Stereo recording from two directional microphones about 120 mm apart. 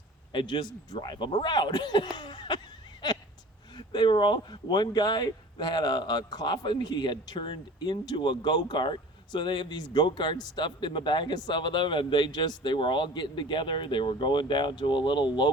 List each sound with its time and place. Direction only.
0.3 s speech: 40° left (ahead or behind)
3.8 s speech: 40° left (ahead or behind)